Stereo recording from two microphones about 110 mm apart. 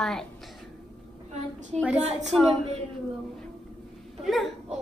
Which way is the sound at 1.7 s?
5° left (ahead or behind).